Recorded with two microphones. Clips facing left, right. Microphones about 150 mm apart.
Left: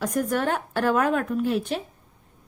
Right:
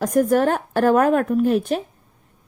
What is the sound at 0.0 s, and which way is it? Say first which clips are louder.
A woman's voice: right 7 dB; 45° right (ahead or behind).